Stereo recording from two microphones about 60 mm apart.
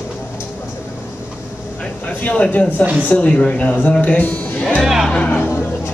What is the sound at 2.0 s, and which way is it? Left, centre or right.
Speech, left.